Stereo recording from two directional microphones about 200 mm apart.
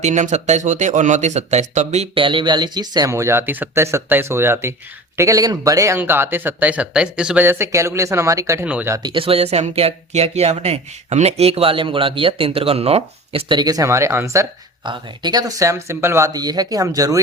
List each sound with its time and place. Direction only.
0.0 s speech: 35° right (ahead or behind); by 9.0 s 10° right (ahead or behind)
9.0 s speech: 25° right (ahead or behind)